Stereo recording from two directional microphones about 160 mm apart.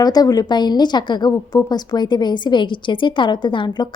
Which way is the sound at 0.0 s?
25° left (ahead or behind).